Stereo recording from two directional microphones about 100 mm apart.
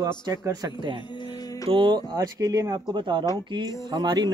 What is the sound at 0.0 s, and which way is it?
Speech, 40° right (ahead or behind).